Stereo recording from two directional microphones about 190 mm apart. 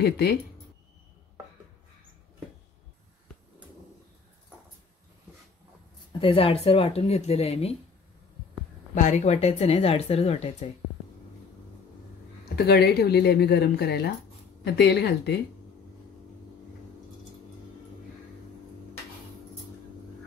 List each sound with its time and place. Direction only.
0.0 s speech: 60° left (ahead or behind)
6.1 s a woman's voice: 30° left (ahead or behind)
8.9 s a woman's voice: 40° left (ahead or behind)
12.4 s speech: 60° left (ahead or behind)